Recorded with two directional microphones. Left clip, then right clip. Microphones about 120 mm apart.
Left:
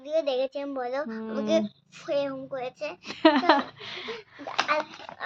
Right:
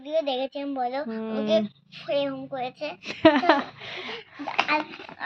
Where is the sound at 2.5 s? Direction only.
25° left (ahead or behind).